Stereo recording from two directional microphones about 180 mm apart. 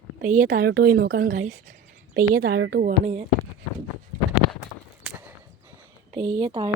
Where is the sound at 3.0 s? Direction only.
35° right (ahead or behind).